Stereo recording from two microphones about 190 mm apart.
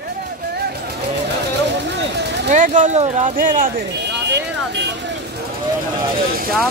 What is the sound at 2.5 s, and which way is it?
Speech, 40° right (ahead or behind).